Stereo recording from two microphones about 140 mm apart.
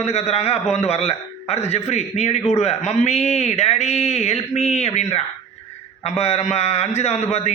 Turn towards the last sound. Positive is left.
turn(degrees=50)  # may be behind; listen again after turning